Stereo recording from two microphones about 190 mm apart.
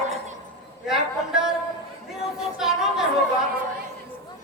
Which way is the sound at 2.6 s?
Centre (ahead or behind).